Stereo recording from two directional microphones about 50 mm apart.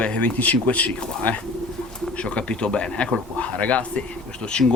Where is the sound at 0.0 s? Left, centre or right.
Left.